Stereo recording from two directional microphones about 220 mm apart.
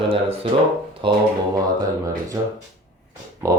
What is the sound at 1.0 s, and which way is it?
Speech, 25° right (ahead or behind).